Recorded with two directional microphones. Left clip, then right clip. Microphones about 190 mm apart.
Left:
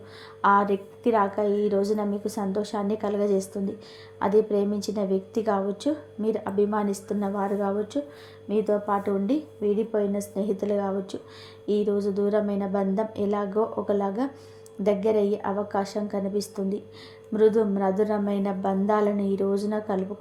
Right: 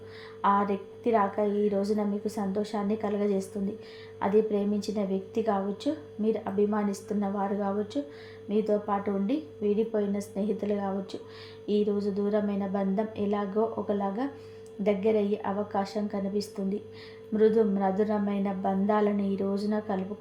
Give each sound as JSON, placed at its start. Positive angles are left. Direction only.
{"t": 0.4, "sound": "a woman's voice", "side_deg": 30}